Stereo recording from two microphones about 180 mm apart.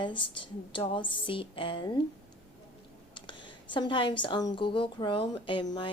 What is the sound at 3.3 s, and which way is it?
Speech, 25° left (ahead or behind).